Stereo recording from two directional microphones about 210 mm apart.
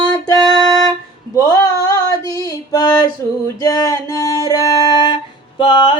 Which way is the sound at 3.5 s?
15° left (ahead or behind).